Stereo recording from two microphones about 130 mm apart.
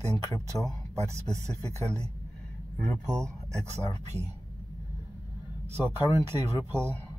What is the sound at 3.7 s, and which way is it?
Speech, 55° right (ahead or behind).